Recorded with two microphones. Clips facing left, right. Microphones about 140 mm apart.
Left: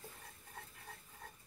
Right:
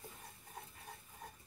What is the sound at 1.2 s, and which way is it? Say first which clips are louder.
Stir: right 2 dB; 15° right (ahead or behind).